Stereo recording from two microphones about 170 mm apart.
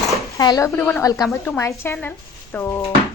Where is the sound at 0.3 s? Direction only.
20° left (ahead or behind).